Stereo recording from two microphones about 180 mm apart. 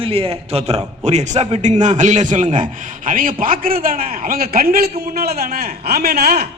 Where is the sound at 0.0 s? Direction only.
30° right (ahead or behind).